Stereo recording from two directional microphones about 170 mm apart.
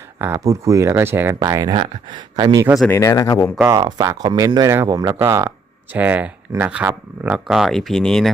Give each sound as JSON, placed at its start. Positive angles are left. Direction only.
{"t": 0.2, "sound": "speech", "side_deg": -15}
{"t": 2.8, "sound": "speech", "side_deg": 15}
{"t": 3.7, "sound": "speech", "side_deg": -25}